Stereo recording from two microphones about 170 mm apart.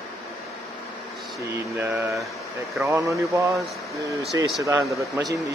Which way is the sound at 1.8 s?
15° right (ahead or behind).